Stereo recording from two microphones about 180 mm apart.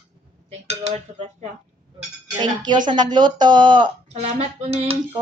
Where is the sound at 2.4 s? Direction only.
25° right (ahead or behind).